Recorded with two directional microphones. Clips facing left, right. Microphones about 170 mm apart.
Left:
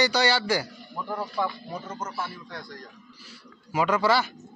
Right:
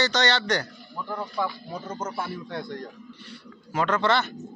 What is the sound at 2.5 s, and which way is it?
Speech, 25° right (ahead or behind).